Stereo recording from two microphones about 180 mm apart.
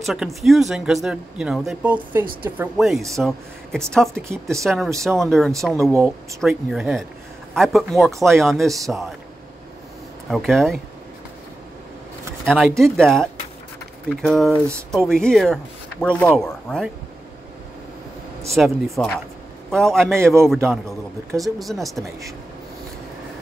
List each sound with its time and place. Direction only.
0.0 s speech: centre (ahead or behind)
4.2 s speech: 15° right (ahead or behind)
4.6 s speech: centre (ahead or behind)
10.3 s speech: centre (ahead or behind)
12.4 s speech: centre (ahead or behind)
18.5 s speech: centre (ahead or behind)
21.4 s speech: centre (ahead or behind)